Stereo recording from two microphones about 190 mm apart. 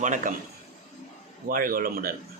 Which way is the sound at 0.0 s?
40° right (ahead or behind).